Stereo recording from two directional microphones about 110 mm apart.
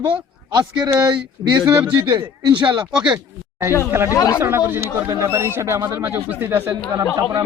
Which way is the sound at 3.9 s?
20° right (ahead or behind).